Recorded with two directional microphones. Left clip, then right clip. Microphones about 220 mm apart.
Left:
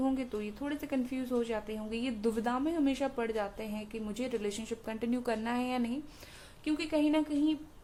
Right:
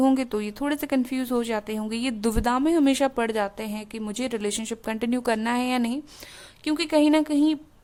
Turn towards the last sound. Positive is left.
turn(degrees=-45)  # may be behind; listen again after turning